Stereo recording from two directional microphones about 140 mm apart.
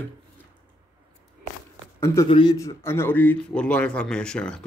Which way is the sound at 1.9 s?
20° left (ahead or behind).